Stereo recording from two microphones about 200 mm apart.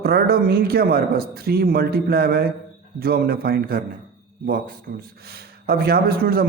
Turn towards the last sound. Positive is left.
turn(degrees=-50)  # may be behind; listen again after turning